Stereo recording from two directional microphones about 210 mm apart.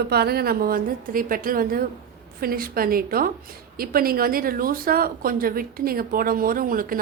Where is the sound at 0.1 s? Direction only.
50° right (ahead or behind).